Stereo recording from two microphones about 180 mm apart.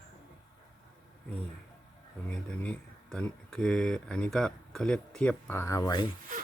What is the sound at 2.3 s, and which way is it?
Speech, 5° left (ahead or behind).